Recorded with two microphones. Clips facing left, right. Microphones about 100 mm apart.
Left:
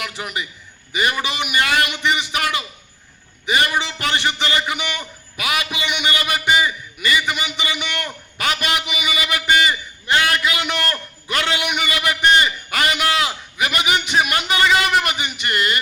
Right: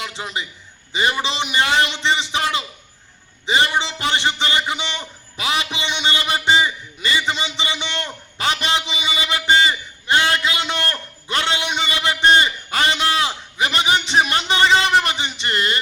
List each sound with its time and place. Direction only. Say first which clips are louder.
0.0 s a man's voice: even; 25° right (ahead or behind)